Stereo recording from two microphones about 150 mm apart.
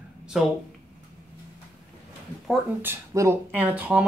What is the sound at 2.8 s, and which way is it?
Speech, 20° right (ahead or behind).